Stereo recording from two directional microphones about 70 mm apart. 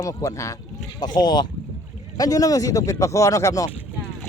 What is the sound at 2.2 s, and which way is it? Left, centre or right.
Speech, left.